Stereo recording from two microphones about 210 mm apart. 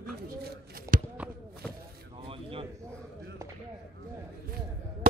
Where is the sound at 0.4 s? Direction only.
40° right (ahead or behind).